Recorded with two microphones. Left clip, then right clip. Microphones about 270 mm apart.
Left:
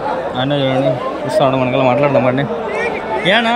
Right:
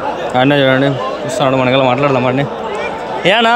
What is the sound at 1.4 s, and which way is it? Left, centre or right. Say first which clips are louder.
A man's voice: right 2 dB; centre.